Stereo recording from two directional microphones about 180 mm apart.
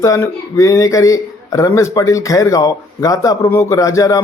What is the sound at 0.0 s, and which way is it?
Speech, 15° left (ahead or behind).